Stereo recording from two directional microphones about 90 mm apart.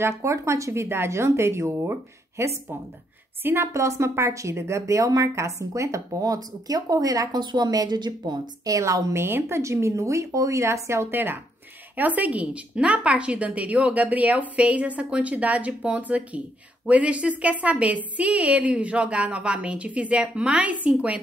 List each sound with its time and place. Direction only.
0.0 s a woman's voice: 30° right (ahead or behind); by 8.7 s 55° right (ahead or behind)
8.7 s a woman's voice: 35° right (ahead or behind); by 21.2 s 15° right (ahead or behind)